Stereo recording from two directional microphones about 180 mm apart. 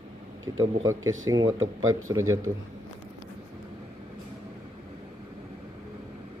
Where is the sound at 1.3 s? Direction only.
20° right (ahead or behind).